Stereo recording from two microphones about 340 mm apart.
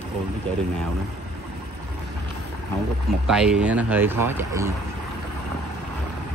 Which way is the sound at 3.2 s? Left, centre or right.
Centre.